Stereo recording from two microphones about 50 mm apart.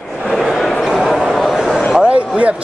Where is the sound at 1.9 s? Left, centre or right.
Right.